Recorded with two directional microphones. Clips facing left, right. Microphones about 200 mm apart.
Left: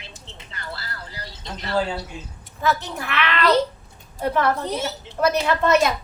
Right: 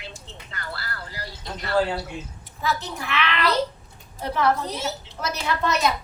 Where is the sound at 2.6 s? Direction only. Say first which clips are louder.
Left 4 dB; 55° left (ahead or behind).